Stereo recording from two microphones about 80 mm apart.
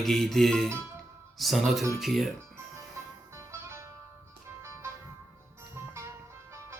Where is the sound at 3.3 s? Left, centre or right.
Right.